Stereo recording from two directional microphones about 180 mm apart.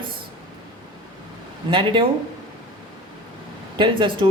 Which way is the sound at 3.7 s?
25° right (ahead or behind).